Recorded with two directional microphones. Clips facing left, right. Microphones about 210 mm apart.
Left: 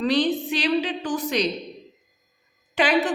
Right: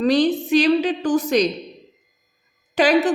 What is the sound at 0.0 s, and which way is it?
A woman's voice, 45° right (ahead or behind).